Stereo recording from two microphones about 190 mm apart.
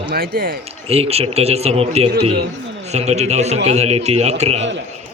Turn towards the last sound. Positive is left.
turn(degrees=-35)  # may be behind; listen again after turning